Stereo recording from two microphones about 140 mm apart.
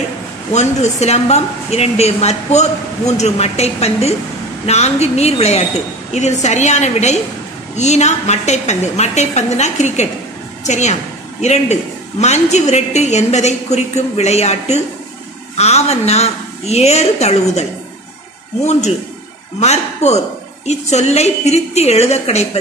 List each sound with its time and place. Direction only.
0.5 s a woman's voice: 55° left (ahead or behind)
19.6 s a woman's voice: 55° left (ahead or behind)